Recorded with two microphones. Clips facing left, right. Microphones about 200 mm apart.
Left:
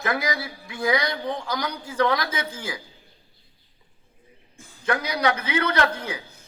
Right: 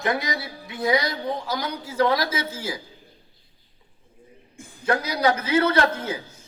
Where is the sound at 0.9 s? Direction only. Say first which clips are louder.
Right 1 dB; 25° right (ahead or behind).